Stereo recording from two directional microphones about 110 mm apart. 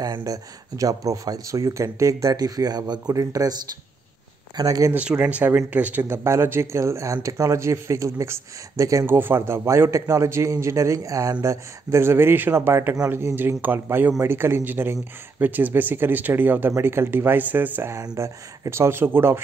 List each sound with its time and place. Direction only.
0.0 s speech: 35° right (ahead or behind)
4.6 s speech: 35° right (ahead or behind)
4.9 s speech: 15° right (ahead or behind)
17.9 s speech: 30° right (ahead or behind)